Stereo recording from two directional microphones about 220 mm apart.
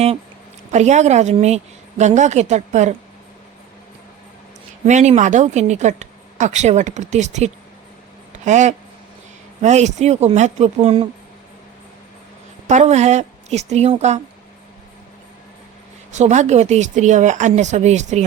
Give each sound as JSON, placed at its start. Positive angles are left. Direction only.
{"t": 0.7, "sound": "speech", "side_deg": -30}
{"t": 4.9, "sound": "speech", "side_deg": -30}
{"t": 8.3, "sound": "a sound", "side_deg": -35}
{"t": 9.6, "sound": "speech", "side_deg": -30}
{"t": 12.6, "sound": "speech", "side_deg": -30}
{"t": 16.1, "sound": "speech", "side_deg": -30}